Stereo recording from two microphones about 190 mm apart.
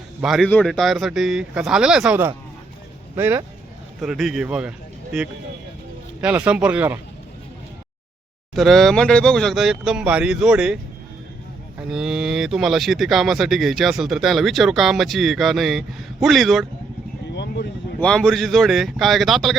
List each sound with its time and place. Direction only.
0.2 s speech: centre (ahead or behind)
8.5 s speech: centre (ahead or behind)
11.8 s speech: 5° right (ahead or behind)
17.3 s a sound: 65° left (ahead or behind)
18.0 s speech: 5° left (ahead or behind)